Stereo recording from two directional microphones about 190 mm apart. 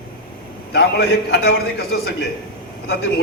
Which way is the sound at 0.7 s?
70° left (ahead or behind).